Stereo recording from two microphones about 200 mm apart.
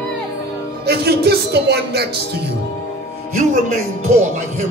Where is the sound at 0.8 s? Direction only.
55° right (ahead or behind).